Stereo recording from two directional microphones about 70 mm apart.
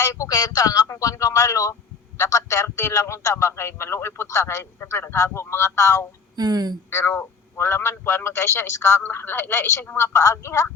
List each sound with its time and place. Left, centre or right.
0.0 s a man's voice: left
4.8 s a man's voice: left
6.3 s speech: right
6.9 s a man's voice: left
10.0 s a man's voice: left